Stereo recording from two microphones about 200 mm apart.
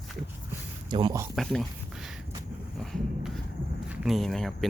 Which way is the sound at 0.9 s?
20° right (ahead or behind).